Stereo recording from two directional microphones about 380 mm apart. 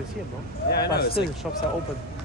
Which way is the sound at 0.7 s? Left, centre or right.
Left.